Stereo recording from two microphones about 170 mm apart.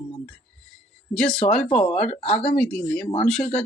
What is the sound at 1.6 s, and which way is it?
Speech, 35° left (ahead or behind).